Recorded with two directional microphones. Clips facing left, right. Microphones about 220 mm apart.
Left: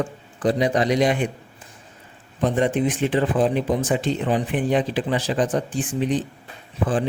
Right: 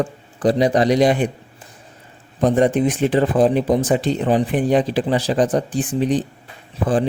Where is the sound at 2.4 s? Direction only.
40° right (ahead or behind).